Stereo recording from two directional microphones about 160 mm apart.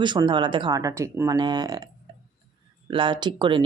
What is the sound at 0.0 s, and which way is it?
Speech, 30° right (ahead or behind).